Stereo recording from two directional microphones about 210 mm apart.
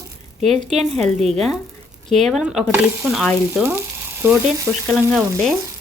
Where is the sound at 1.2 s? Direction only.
Centre (ahead or behind).